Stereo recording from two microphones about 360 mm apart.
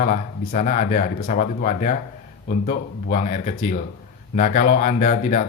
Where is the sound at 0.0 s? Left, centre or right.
Left.